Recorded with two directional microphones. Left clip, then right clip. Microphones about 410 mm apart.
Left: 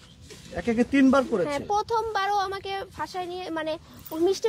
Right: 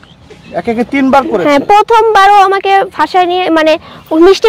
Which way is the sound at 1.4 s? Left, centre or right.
Right.